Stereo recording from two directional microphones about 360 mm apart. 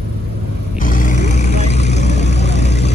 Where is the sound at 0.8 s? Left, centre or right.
Left.